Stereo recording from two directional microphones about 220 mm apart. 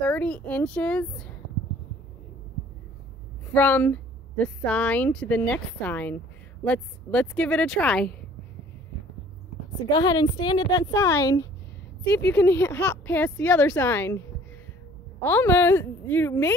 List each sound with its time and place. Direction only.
0.1 s a woman's voice: 5° left (ahead or behind)
3.5 s a woman's voice: 10° left (ahead or behind)
9.8 s a woman's voice: 20° left (ahead or behind)
15.2 s a woman's voice: 10° left (ahead or behind)